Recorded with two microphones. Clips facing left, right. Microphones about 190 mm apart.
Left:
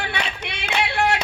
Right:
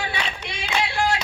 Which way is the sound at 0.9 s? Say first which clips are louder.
Left 2 dB; 65° left (ahead or behind).